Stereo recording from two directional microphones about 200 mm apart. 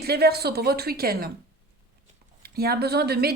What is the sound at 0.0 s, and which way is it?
A woman's voice, 50° right (ahead or behind).